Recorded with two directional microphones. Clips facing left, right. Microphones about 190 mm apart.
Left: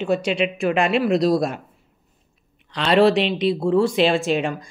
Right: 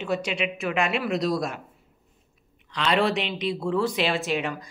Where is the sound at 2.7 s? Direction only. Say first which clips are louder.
Left 7 dB; 35° left (ahead or behind).